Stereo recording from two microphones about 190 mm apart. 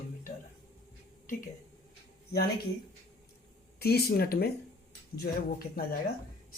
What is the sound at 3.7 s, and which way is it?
Speech, 55° left (ahead or behind).